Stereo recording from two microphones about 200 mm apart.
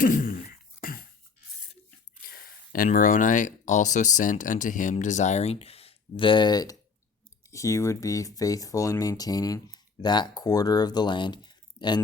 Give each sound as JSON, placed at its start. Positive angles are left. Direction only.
{"t": 0.0, "sound": "throat clearing", "side_deg": 45}
{"t": 2.2, "sound": "speech", "side_deg": 45}